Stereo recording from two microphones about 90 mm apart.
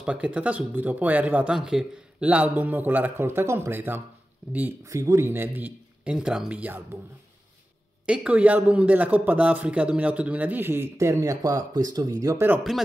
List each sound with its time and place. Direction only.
0.0 s a man's voice: 15° right (ahead or behind)
2.2 s a man's voice: 20° right (ahead or behind)
4.8 s a man's voice: 35° right (ahead or behind)
6.1 s a man's voice: 5° right (ahead or behind)
8.1 s a man's voice: 15° right (ahead or behind); by 12.4 s 40° right (ahead or behind)